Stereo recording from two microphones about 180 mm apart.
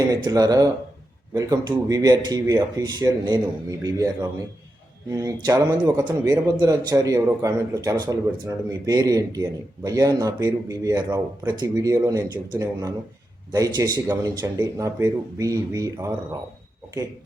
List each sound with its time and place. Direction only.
0.1 s a man's voice: 20° right (ahead or behind)